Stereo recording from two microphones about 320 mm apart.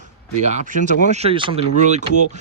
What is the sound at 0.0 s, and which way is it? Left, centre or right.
Speech, right.